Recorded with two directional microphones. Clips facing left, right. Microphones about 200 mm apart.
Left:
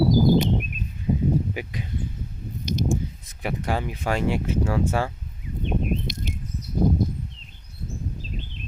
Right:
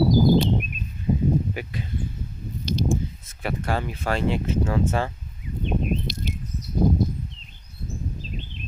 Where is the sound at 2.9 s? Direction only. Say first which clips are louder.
Right 1 dB; 15° left (ahead or behind).